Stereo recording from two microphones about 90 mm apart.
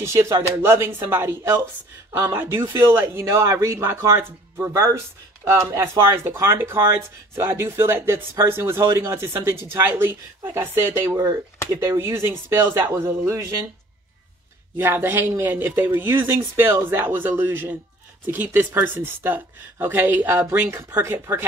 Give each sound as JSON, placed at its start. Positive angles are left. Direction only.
{"t": 0.0, "sound": "speech", "side_deg": -30}
{"t": 14.8, "sound": "speech", "side_deg": -25}